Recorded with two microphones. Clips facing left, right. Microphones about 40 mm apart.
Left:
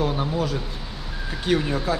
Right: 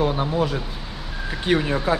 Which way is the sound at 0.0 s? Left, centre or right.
Centre.